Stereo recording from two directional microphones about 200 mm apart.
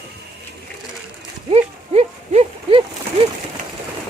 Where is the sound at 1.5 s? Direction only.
30° right (ahead or behind).